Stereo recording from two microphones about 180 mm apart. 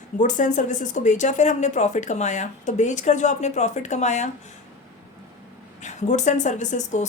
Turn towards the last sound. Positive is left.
turn(degrees=40)  # may be behind; listen again after turning